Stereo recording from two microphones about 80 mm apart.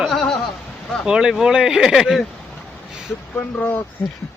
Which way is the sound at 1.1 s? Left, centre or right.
Centre.